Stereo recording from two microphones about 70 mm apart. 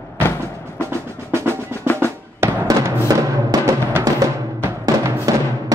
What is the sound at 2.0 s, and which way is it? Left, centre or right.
Drum, right.